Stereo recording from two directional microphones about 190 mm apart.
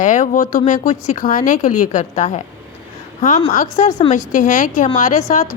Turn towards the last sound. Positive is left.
turn(degrees=40)  # may be behind; listen again after turning